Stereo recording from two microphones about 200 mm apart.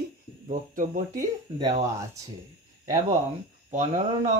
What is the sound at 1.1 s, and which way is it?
Speech, 20° right (ahead or behind).